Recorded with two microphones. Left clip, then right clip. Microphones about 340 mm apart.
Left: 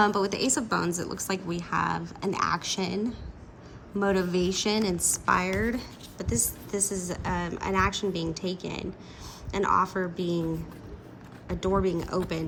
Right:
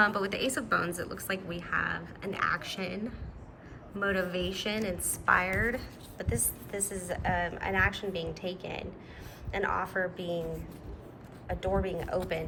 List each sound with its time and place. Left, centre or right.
0.0 s a woman's voice: centre
4.0 s a woman's voice: centre
11.8 s a woman's voice: centre